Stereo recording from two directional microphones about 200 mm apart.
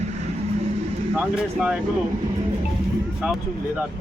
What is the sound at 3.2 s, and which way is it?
Speech, 5° right (ahead or behind).